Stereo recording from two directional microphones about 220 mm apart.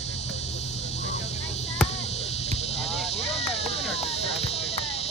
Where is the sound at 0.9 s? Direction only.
30° left (ahead or behind).